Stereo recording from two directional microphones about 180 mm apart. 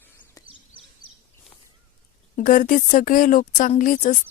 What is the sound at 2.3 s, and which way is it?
Speech, 50° left (ahead or behind).